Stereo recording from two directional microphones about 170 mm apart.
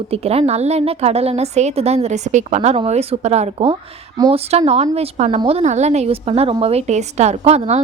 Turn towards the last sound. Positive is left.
turn(degrees=-40)  # may be behind; listen again after turning